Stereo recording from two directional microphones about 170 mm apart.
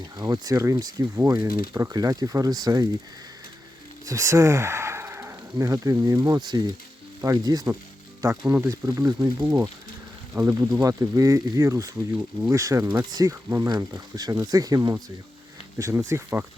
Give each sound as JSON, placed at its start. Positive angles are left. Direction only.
{"t": 0.2, "sound": "speech", "side_deg": -20}
{"t": 4.0, "sound": "speech", "side_deg": -20}
{"t": 8.3, "sound": "speech", "side_deg": -10}